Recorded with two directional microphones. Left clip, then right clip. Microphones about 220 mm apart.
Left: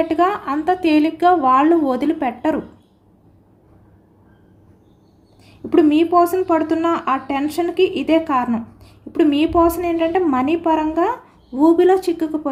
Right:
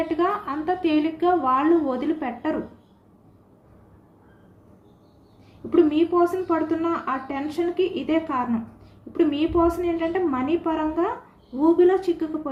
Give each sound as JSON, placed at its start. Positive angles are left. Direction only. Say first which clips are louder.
{"t": 0.1, "sound": "a woman's voice", "louder": "left 6 dB", "side_deg": 50}
{"t": 5.7, "sound": "a woman's voice", "louder": "left 6 dB", "side_deg": 50}